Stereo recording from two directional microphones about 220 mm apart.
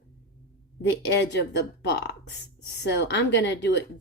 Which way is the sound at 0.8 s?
55° left (ahead or behind).